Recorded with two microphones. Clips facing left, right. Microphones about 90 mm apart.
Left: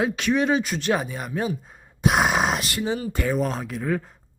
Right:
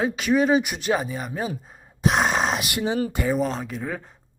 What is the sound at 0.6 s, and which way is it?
Speech, 15° right (ahead or behind).